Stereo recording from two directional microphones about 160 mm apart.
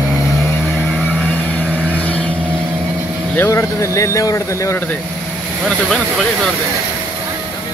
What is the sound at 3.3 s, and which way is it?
Speech, 15° left (ahead or behind).